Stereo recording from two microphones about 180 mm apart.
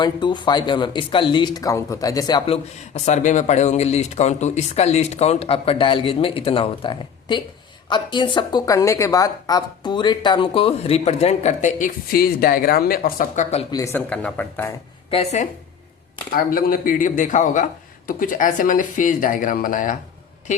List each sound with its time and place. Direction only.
0.0 s speech: 25° left (ahead or behind)
2.9 s speech: 40° left (ahead or behind)
13.7 s speech: 20° left (ahead or behind)
15.1 s speech: 35° left (ahead or behind)
16.3 s a woman's voice: 50° left (ahead or behind)